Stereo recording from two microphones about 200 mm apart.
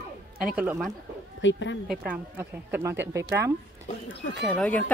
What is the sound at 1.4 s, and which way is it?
Speech, 65° left (ahead or behind).